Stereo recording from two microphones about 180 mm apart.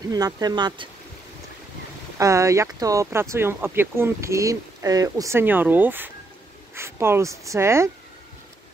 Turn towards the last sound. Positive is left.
turn(degrees=-15)  # may be behind; listen again after turning